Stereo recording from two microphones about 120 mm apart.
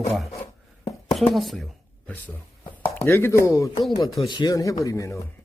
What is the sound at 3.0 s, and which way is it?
Speech, 20° left (ahead or behind).